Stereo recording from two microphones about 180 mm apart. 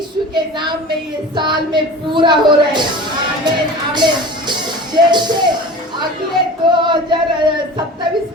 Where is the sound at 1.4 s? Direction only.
25° right (ahead or behind).